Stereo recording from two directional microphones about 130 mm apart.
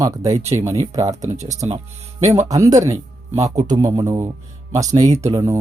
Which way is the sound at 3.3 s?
60° right (ahead or behind).